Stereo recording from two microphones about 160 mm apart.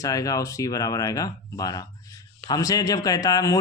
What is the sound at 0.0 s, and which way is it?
A man's voice, 20° left (ahead or behind).